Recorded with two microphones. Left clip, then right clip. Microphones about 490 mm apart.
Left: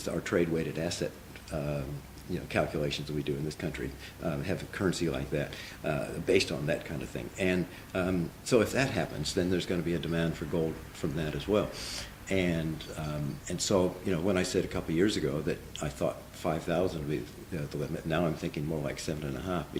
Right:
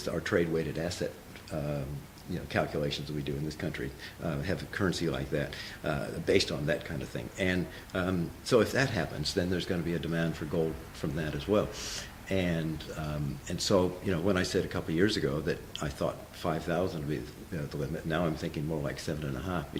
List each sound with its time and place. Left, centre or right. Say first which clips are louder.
0.0 s speech: even; right